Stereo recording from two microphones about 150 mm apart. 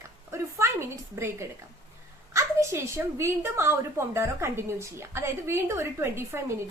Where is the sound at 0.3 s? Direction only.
15° right (ahead or behind).